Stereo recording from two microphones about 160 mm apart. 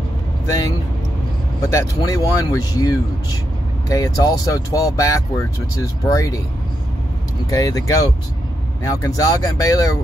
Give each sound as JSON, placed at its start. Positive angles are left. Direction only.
{"t": 0.5, "sound": "speech", "side_deg": 25}
{"t": 7.4, "sound": "speech", "side_deg": 20}